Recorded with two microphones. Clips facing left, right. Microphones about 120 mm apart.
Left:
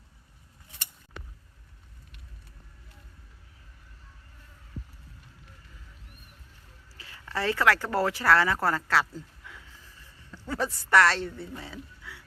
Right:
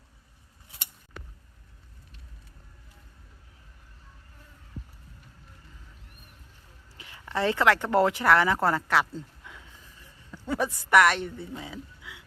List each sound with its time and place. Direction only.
6.9 s speech: 20° right (ahead or behind)